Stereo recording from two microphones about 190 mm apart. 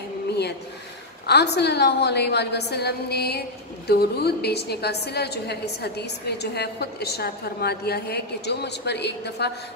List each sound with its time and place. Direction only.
1.2 s a woman's voice: 60° left (ahead or behind)